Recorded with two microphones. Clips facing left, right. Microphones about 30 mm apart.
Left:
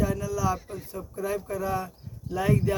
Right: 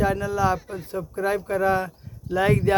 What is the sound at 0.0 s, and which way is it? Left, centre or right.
Speech, right.